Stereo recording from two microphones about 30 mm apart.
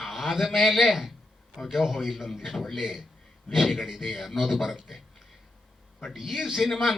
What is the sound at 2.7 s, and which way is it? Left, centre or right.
Speech, centre.